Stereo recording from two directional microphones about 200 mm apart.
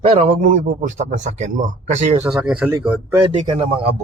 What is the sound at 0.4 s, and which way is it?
Speech, 40° right (ahead or behind).